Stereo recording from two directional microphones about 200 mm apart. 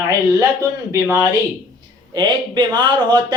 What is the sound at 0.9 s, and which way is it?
A man's voice, 15° right (ahead or behind).